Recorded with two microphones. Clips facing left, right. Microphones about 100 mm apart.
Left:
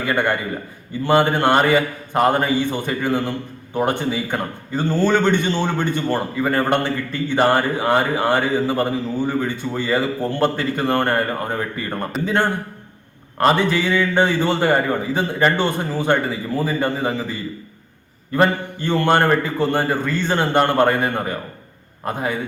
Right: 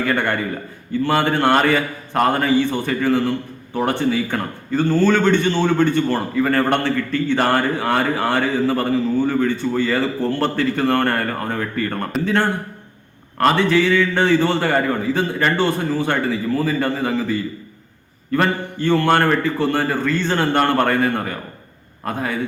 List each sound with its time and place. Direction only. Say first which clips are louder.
0.0 s a man's voice: even; 15° left (ahead or behind)
18.3 s a man's voice: left 1 dB; 20° left (ahead or behind)